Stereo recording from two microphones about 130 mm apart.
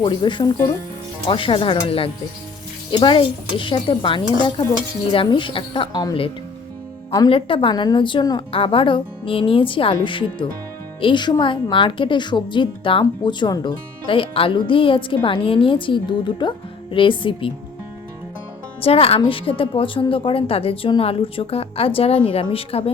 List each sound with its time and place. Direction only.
0.0 s a woman's voice: 40° left (ahead or behind)
7.3 s a woman's voice: 45° left (ahead or behind)
18.8 s a woman's voice: 45° left (ahead or behind)